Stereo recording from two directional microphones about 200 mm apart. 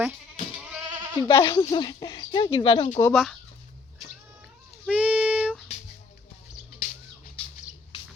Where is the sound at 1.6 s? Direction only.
25° left (ahead or behind).